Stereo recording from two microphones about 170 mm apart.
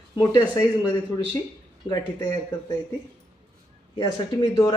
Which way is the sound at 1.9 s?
25° left (ahead or behind).